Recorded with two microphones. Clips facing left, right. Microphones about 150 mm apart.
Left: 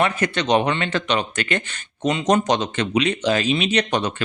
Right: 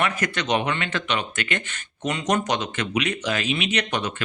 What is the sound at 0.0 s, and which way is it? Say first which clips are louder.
Speech: left 4 dB; 30° left (ahead or behind).